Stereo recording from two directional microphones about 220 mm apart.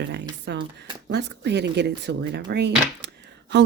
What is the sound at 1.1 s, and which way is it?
Speech, 50° right (ahead or behind).